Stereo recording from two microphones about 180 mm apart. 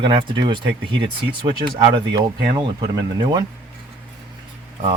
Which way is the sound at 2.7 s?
25° right (ahead or behind).